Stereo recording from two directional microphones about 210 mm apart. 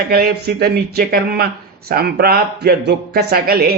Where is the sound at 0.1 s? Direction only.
45° right (ahead or behind).